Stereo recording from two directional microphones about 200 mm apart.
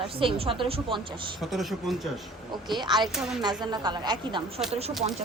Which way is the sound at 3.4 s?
20° right (ahead or behind).